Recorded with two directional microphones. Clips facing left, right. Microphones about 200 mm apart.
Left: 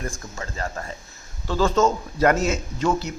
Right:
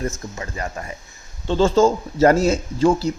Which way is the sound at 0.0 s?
20° right (ahead or behind).